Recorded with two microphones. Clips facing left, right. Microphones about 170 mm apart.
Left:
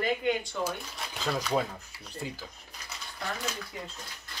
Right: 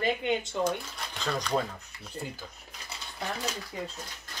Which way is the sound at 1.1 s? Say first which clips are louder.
Left 1 dB; 5° left (ahead or behind).